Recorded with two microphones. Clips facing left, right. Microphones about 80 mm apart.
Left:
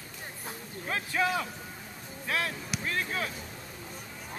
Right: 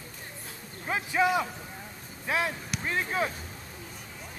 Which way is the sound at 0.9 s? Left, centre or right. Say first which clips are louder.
Right 4 dB; centre.